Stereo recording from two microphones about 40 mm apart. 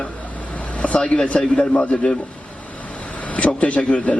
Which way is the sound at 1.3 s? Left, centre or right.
Left.